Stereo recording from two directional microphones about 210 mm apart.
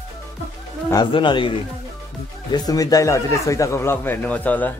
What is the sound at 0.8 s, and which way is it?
Speech, 20° left (ahead or behind).